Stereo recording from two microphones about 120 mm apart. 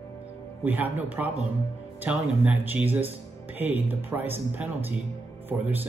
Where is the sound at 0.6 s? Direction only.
15° right (ahead or behind).